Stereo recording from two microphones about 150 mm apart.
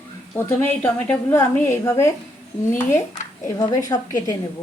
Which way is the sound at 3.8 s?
25° left (ahead or behind).